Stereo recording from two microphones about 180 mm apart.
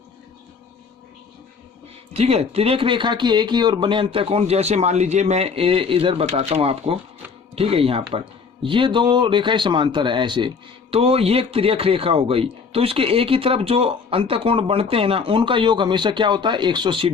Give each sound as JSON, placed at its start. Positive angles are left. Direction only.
{"t": 2.1, "sound": "speech", "side_deg": -35}